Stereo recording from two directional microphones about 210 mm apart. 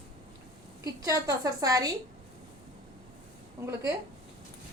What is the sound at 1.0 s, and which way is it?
Speech, 15° right (ahead or behind).